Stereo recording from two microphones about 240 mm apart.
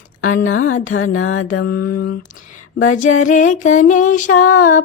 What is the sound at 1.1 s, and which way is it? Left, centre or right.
Mantra, left.